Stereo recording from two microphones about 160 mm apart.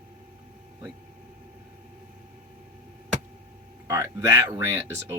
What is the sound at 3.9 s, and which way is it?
Speech, 20° right (ahead or behind).